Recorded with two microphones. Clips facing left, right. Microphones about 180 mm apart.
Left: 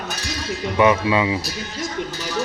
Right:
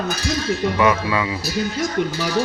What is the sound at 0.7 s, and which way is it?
Speech, 25° left (ahead or behind).